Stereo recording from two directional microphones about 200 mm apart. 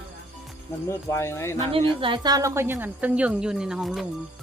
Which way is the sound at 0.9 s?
15° left (ahead or behind).